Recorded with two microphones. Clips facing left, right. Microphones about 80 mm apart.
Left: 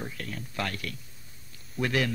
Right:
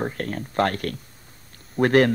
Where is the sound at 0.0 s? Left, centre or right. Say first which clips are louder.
Right 10 dB; right.